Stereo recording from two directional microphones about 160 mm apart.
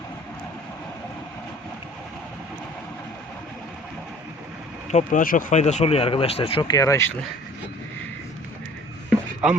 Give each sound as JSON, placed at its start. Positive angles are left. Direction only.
{"t": 4.9, "sound": "speech", "side_deg": 50}
{"t": 9.4, "sound": "speech", "side_deg": -5}